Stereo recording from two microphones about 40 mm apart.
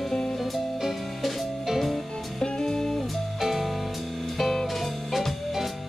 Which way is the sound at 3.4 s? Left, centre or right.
Centre.